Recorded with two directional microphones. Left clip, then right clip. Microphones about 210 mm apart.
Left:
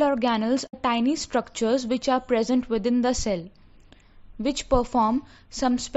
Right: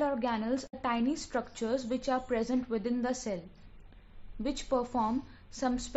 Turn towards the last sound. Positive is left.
turn(degrees=35)  # may be behind; listen again after turning